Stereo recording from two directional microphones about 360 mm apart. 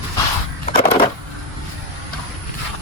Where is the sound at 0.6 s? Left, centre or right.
Centre.